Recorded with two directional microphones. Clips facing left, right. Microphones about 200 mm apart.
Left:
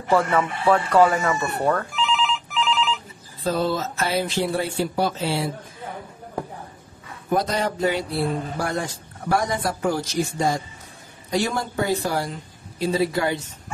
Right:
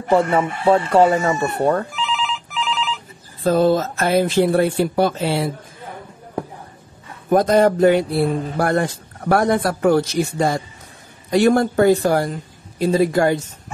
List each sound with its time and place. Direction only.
0.1 s speech: 25° right (ahead or behind)
1.9 s telephone bell ringing: centre (ahead or behind)
3.4 s speech: 50° right (ahead or behind)
7.2 s speech: 50° right (ahead or behind)